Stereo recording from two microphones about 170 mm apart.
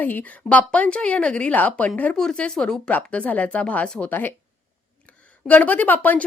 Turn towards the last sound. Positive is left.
turn(degrees=10)  # may be behind; listen again after turning